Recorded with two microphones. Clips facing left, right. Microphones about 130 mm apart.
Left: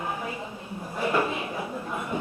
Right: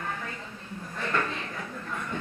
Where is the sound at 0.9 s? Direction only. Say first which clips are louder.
Left 5 dB; 15° left (ahead or behind).